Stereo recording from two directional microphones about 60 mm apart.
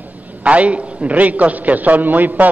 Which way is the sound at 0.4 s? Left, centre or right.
Right.